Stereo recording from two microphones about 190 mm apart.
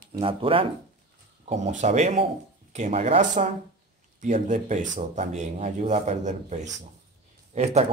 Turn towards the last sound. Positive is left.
turn(degrees=-35)  # may be behind; listen again after turning